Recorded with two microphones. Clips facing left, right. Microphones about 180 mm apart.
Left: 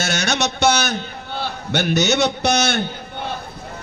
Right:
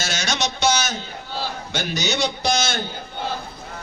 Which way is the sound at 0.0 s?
60° left (ahead or behind).